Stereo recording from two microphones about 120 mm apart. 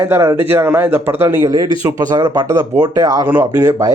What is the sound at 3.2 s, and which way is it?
Speech, 15° right (ahead or behind).